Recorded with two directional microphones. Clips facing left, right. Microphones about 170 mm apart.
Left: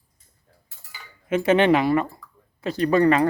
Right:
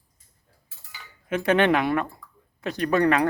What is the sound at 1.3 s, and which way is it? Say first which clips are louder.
Speech: left 3 dB; 5° left (ahead or behind).